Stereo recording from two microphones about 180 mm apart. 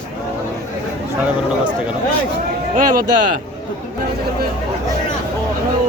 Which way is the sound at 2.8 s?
50° right (ahead or behind).